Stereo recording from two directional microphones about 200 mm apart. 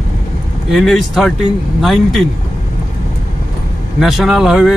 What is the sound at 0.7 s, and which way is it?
Speech, centre (ahead or behind).